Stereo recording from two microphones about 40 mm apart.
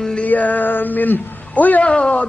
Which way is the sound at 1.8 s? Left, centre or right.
Left.